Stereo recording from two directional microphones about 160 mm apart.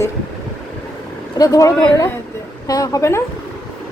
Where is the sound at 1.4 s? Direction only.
20° left (ahead or behind).